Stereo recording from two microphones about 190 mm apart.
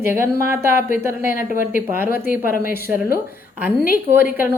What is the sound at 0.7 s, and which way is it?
A woman's voice, 45° left (ahead or behind).